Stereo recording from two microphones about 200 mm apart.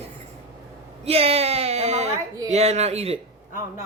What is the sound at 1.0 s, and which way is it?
Speech, 30° right (ahead or behind).